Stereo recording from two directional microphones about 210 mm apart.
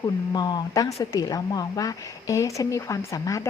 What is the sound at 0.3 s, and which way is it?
A woman's voice, 20° left (ahead or behind).